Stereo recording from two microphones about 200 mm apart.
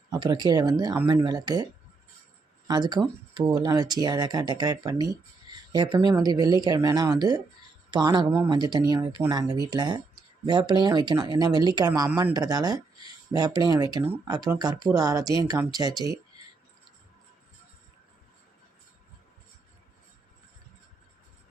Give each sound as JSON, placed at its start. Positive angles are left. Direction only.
{"t": 0.1, "sound": "speech", "side_deg": -20}
{"t": 2.6, "sound": "speech", "side_deg": -20}